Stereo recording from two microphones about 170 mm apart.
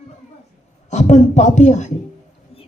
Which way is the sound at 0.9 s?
45° left (ahead or behind).